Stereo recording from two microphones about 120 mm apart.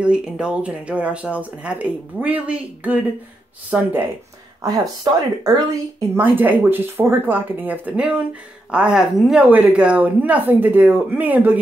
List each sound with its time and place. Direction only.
0.0 s speech: 10° right (ahead or behind)
4.6 s speech: 30° right (ahead or behind)
5.9 s speech: 15° right (ahead or behind)